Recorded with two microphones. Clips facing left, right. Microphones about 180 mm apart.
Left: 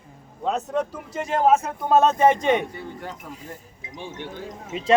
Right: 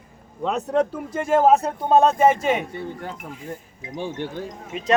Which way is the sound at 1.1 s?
50° right (ahead or behind).